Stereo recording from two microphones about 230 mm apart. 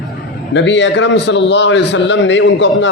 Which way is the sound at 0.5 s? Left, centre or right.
Left.